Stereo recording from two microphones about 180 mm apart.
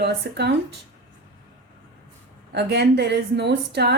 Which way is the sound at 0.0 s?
65° right (ahead or behind).